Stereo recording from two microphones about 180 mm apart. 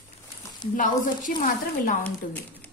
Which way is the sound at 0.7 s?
45° left (ahead or behind).